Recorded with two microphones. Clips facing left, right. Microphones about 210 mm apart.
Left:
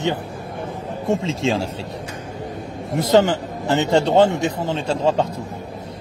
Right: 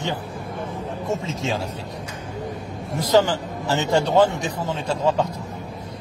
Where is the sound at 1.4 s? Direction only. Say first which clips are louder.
Left 5 dB; 30° left (ahead or behind).